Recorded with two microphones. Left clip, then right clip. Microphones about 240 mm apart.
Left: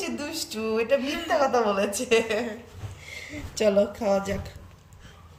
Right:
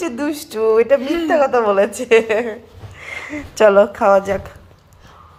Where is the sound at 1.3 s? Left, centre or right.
Right.